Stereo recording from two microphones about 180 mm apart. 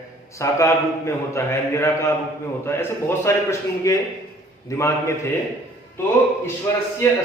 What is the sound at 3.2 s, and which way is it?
A man's voice, 15° left (ahead or behind).